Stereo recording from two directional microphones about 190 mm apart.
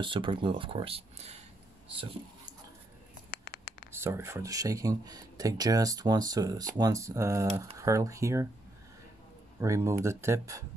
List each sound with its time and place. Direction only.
0.0 s speech: 25° right (ahead or behind)
3.3 s a sound: 50° left (ahead or behind)
3.9 s speech: 15° right (ahead or behind)
9.6 s speech: 15° right (ahead or behind)